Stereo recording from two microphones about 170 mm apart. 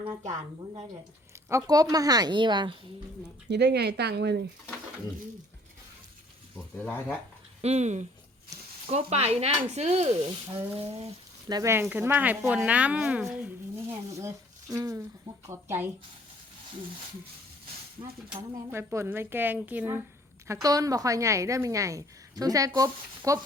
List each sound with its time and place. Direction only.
1.5 s a woman's voice: 20° right (ahead or behind)
3.5 s speech: 80° right
6.7 s speech: 10° left (ahead or behind)
7.6 s speech: 40° right (ahead or behind)
11.4 s speech: 20° right (ahead or behind)
13.9 s speech: 15° right (ahead or behind)
18.7 s a woman's voice: 15° right (ahead or behind)